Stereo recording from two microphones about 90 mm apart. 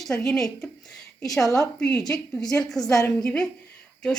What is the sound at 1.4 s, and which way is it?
Speech, 40° left (ahead or behind).